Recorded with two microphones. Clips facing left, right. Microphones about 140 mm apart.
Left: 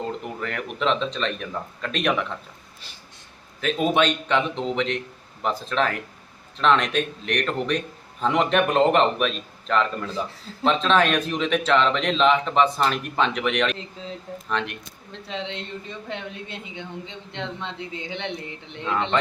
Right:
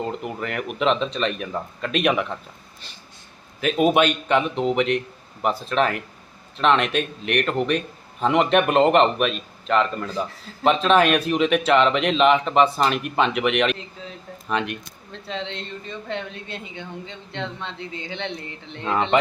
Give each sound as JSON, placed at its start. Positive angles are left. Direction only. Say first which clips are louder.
{"t": 0.3, "sound": "speech", "louder": "right 2 dB", "side_deg": -10}
{"t": 3.6, "sound": "a man's voice", "louder": "right 3 dB", "side_deg": -10}
{"t": 15.3, "sound": "speech", "louder": "right 1 dB", "side_deg": 15}
{"t": 19.1, "sound": "speech", "louder": "right 4 dB", "side_deg": -15}